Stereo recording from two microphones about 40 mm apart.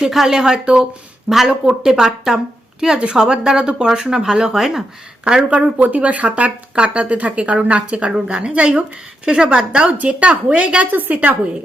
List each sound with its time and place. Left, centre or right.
0.1 s a woman's voice: centre
5.7 s a woman's voice: right
10.9 s a woman's voice: right